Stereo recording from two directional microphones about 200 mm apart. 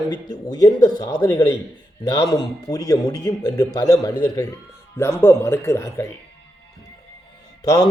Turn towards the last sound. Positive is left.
turn(degrees=20)  # may be behind; listen again after turning